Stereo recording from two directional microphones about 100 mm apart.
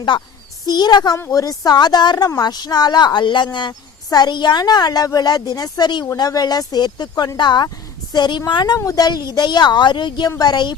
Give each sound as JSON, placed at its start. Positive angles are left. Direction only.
{"t": 0.1, "sound": "speech", "side_deg": 50}